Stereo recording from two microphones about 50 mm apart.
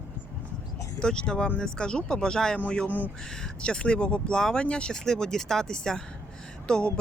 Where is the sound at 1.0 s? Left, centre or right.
Centre.